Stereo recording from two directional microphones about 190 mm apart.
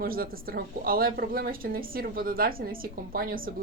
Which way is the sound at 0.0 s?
50° right (ahead or behind).